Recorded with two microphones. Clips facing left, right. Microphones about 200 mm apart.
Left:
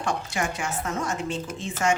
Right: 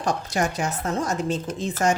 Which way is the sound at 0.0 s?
40° right (ahead or behind).